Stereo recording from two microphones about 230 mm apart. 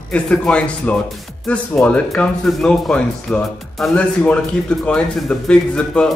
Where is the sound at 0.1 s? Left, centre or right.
Centre.